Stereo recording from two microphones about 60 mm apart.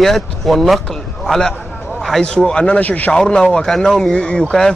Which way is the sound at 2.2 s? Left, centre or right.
Centre.